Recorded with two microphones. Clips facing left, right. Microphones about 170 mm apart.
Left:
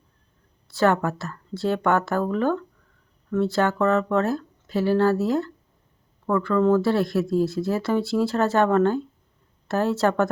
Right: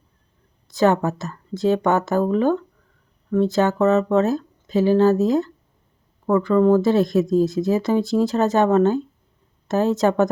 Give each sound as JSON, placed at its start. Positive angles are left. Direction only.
{"t": 0.7, "sound": "speech", "side_deg": -20}